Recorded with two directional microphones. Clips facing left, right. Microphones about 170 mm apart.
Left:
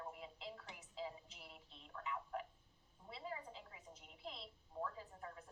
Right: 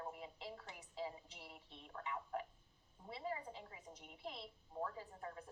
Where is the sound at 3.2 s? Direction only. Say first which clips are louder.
Right 4 dB; 30° right (ahead or behind).